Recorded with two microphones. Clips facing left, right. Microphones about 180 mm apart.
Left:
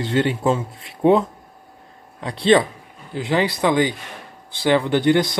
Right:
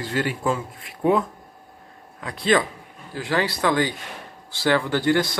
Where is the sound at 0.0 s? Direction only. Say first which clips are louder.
Left 5 dB; 25° left (ahead or behind).